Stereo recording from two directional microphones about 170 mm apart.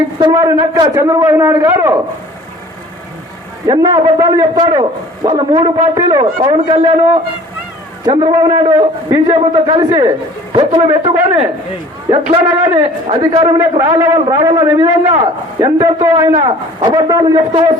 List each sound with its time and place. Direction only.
0.2 s a man's voice: 20° right (ahead or behind)
3.7 s a man's voice: 20° right (ahead or behind)
14.0 s a man's voice: 20° right (ahead or behind)